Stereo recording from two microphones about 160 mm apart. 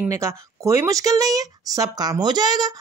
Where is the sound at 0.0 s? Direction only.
20° right (ahead or behind).